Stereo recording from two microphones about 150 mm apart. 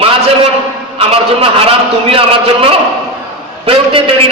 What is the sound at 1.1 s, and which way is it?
A man's voice, 40° right (ahead or behind).